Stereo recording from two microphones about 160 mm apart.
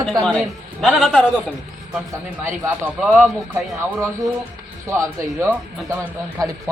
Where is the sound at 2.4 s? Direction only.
10° right (ahead or behind).